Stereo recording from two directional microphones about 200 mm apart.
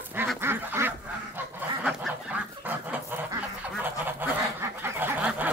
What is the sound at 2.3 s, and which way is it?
Goose, 10° right (ahead or behind).